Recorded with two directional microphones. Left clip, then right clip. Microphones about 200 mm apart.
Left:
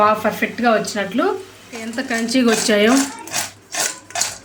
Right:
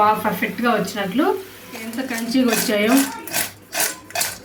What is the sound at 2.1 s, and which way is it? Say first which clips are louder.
Speech: left 3 dB; 50° left (ahead or behind).